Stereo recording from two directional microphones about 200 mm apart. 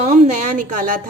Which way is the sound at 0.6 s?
40° right (ahead or behind).